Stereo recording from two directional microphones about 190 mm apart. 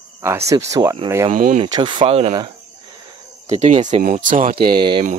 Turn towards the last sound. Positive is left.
turn(degrees=-25)  # may be behind; listen again after turning